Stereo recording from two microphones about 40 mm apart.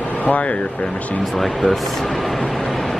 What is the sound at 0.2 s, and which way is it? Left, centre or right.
Speech, left.